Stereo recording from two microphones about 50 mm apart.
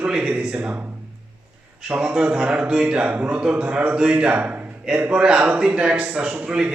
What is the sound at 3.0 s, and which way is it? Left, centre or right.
A man's voice, right.